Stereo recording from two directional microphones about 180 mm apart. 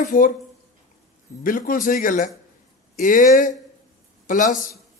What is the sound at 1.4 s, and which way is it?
A man's voice, 50° left (ahead or behind).